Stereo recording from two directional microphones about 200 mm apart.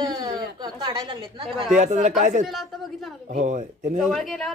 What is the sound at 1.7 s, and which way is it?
Speech, 35° right (ahead or behind).